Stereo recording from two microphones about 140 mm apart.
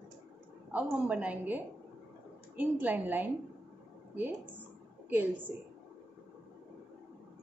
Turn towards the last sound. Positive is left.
turn(degrees=-15)  # may be behind; listen again after turning